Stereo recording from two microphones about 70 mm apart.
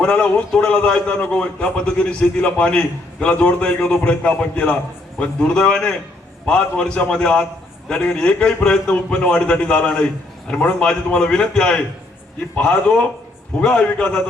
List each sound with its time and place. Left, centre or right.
0.0 s a man's voice: centre